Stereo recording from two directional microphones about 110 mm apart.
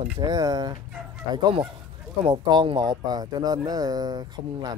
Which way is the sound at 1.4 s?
45° right (ahead or behind).